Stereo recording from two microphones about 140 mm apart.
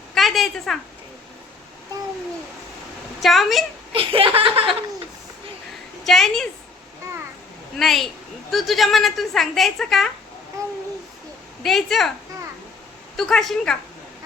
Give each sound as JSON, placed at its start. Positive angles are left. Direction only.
{"t": 0.1, "sound": "a sound", "side_deg": 0}
{"t": 3.2, "sound": "a woman's voice", "side_deg": 0}
{"t": 3.9, "sound": "a sound", "side_deg": -40}
{"t": 6.1, "sound": "a woman's voice", "side_deg": 5}
{"t": 7.8, "sound": "a woman's voice", "side_deg": 0}
{"t": 10.6, "sound": "babbling", "side_deg": -20}
{"t": 11.6, "sound": "a woman's voice", "side_deg": 0}
{"t": 13.1, "sound": "a woman's voice", "side_deg": 0}